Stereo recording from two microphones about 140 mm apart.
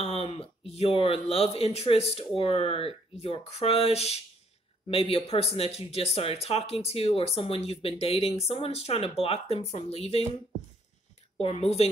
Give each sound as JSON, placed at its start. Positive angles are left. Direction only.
{"t": 0.0, "sound": "speech", "side_deg": 45}
{"t": 11.3, "sound": "speech", "side_deg": 50}